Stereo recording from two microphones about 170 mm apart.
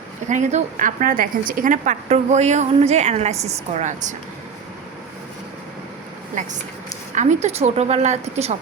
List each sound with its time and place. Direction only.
0.3 s a woman's voice: 45° right (ahead or behind)
6.4 s a woman's voice: 45° right (ahead or behind)